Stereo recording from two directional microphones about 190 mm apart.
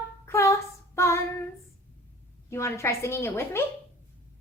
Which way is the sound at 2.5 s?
15° left (ahead or behind).